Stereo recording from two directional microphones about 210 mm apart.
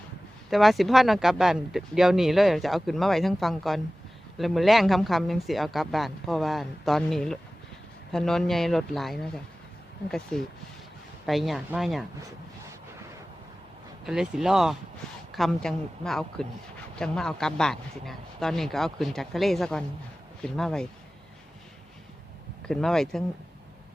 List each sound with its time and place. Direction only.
0.5 s speech: centre (ahead or behind)
14.0 s speech: centre (ahead or behind)
22.6 s speech: centre (ahead or behind)